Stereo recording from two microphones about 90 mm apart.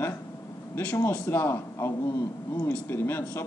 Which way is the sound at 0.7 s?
25° left (ahead or behind).